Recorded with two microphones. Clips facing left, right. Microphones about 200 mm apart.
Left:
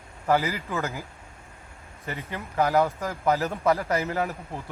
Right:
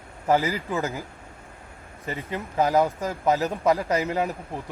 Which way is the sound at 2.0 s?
20° right (ahead or behind).